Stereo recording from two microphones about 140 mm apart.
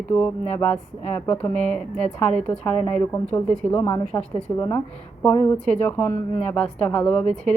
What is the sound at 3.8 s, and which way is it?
A woman's voice, 20° left (ahead or behind).